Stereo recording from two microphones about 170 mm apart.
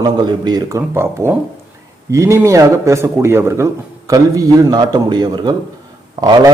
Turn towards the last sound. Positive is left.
turn(degrees=-20)  # may be behind; listen again after turning